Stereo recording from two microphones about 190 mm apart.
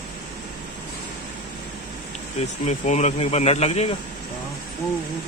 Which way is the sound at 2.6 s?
40° left (ahead or behind).